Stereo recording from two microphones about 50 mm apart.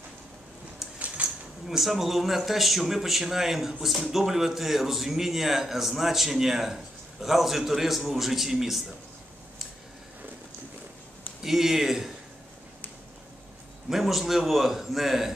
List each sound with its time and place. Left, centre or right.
0.9 s a sound: right
1.7 s speech: centre
11.4 s speech: centre
13.8 s speech: centre